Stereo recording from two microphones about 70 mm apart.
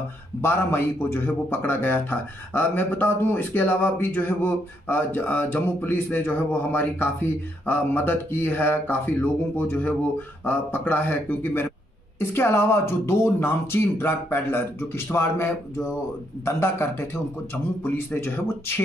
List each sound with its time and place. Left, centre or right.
0.4 s speech: left
12.2 s speech: left